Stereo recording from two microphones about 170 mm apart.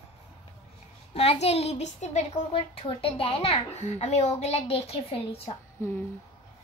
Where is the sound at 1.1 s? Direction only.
35° left (ahead or behind).